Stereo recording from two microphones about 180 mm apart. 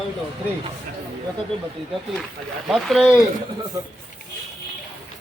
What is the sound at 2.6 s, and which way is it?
Speech, centre (ahead or behind).